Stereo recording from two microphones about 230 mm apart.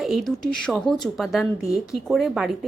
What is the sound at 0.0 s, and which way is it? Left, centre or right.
Speech, centre.